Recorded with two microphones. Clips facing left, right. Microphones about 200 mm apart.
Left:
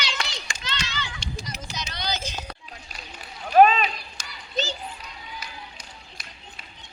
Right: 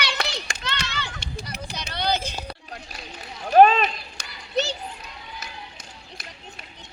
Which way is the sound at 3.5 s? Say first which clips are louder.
Right 2 dB; 45° right (ahead or behind).